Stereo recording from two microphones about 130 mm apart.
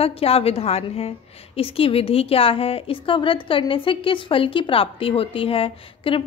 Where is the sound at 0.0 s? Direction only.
50° left (ahead or behind).